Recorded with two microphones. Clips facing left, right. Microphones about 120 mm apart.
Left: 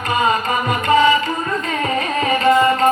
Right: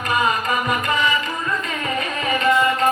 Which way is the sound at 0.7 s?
35° left (ahead or behind).